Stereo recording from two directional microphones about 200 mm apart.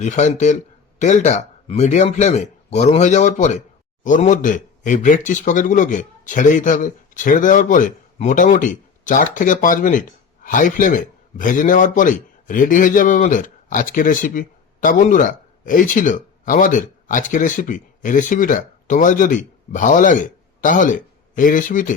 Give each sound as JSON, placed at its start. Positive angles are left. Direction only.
{"t": 0.0, "sound": "a man's voice", "side_deg": 35}